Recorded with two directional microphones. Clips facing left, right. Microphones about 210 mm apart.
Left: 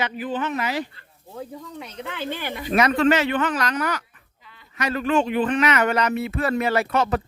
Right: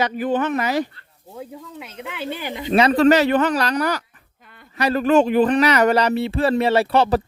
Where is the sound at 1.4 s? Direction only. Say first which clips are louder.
Even; 5° right (ahead or behind); by 4.0 s 35° right (ahead or behind).